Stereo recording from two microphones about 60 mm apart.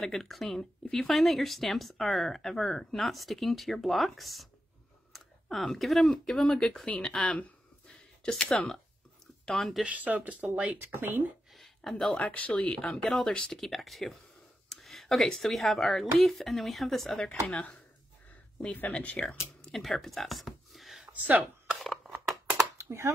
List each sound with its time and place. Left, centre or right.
0.0 s speech: centre; by 7.5 s left
8.2 s speech: centre
9.5 s speech: centre
9.8 s speech: right
11.5 s a sound: centre
12.2 s speech: left
13.6 s speech: centre
17.5 s speech: left
19.7 s speech: centre
21.0 s a sound: right
21.7 s a sound: centre
22.8 s a sound: right